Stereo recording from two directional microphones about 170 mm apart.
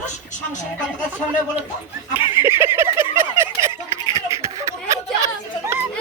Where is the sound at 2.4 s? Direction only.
15° right (ahead or behind).